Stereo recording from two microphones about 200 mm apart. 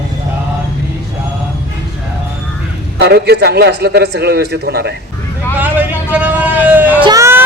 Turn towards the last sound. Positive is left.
turn(degrees=-15)  # may be behind; listen again after turning